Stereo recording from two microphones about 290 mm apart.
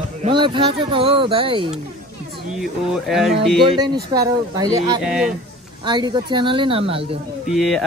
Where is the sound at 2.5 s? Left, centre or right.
Centre.